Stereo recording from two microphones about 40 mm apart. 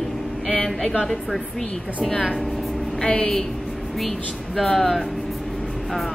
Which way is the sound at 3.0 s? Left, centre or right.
Left.